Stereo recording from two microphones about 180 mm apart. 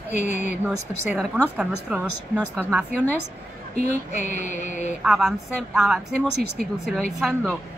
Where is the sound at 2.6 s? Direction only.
10° left (ahead or behind).